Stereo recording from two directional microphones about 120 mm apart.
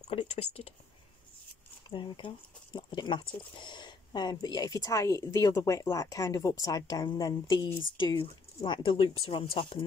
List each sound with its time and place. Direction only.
0.1 s speech: 60° left (ahead or behind)
1.9 s speech: 45° left (ahead or behind)